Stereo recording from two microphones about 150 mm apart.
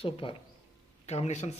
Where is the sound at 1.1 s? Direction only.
45° left (ahead or behind).